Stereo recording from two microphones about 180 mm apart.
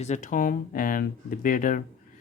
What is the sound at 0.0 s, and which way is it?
Speech, 40° left (ahead or behind).